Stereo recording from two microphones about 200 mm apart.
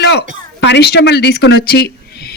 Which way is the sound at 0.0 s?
55° left (ahead or behind).